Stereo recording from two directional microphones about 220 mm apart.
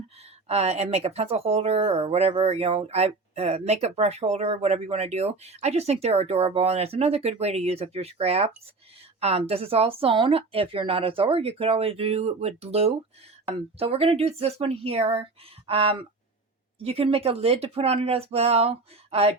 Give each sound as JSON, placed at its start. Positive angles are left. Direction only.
{"t": 0.4, "sound": "speech", "side_deg": -30}